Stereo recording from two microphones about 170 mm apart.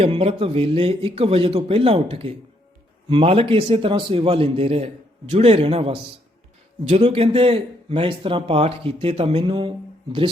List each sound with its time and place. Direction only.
0.0 s speech: 35° right (ahead or behind)